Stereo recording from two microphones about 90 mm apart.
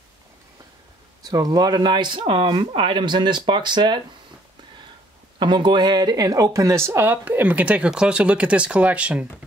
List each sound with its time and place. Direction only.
1.2 s speech: 45° right (ahead or behind)
5.4 s speech: 60° right (ahead or behind); by 9.2 s 15° right (ahead or behind)